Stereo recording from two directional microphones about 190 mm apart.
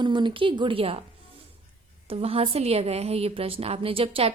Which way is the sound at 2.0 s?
30° right (ahead or behind).